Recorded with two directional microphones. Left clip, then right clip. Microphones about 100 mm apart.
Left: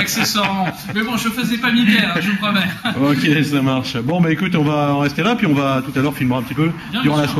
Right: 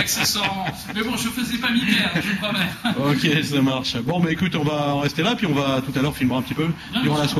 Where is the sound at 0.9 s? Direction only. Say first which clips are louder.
Left 5 dB; centre (ahead or behind).